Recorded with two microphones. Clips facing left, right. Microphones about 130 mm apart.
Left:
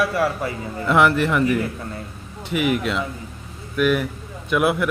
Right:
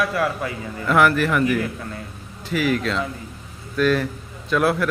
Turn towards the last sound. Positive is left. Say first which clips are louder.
# even
turn(degrees=15)  # may be behind; listen again after turning